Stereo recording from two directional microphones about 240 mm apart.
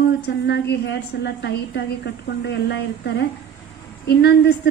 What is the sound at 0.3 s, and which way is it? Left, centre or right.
Speech, left.